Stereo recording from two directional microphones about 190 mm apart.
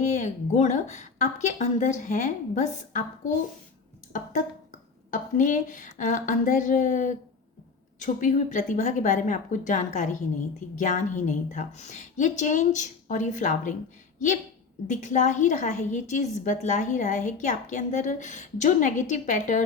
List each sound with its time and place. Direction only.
0.0 s a woman's voice: 40° left (ahead or behind)
4.1 s a sound: 40° left (ahead or behind)
5.1 s a woman's voice: 40° left (ahead or behind)
14.8 s a woman's voice: 40° left (ahead or behind)